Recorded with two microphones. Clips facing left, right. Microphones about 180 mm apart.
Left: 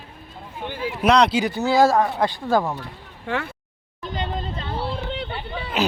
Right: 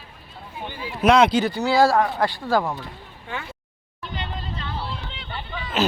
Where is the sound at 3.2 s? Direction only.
70° left (ahead or behind).